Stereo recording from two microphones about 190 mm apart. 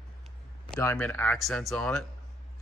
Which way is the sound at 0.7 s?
15° left (ahead or behind).